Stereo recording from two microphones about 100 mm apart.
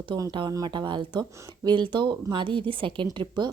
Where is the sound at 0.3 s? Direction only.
50° right (ahead or behind).